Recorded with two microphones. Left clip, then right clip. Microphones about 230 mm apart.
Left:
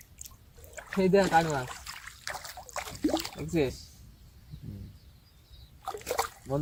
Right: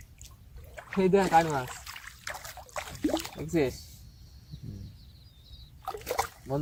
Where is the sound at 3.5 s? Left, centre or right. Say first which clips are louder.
Right 1 dB; centre.